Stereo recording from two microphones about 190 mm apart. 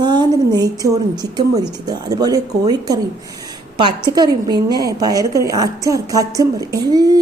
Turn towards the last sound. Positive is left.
turn(degrees=-20)  # may be behind; listen again after turning